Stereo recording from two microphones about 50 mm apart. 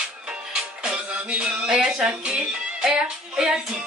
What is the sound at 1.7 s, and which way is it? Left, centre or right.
Speech, centre.